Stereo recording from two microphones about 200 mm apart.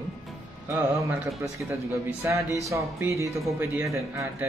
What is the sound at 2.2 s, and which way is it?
A man's voice, 15° right (ahead or behind).